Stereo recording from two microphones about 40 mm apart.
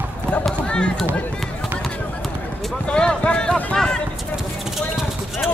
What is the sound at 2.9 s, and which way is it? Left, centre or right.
Speech, left.